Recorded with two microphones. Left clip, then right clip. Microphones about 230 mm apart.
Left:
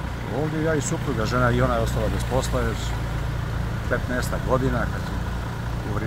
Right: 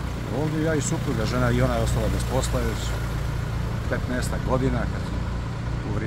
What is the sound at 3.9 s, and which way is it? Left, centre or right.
Speech, centre.